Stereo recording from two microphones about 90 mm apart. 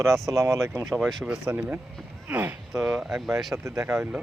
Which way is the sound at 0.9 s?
5° right (ahead or behind).